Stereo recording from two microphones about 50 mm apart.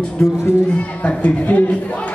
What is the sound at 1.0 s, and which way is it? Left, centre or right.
Speech, left.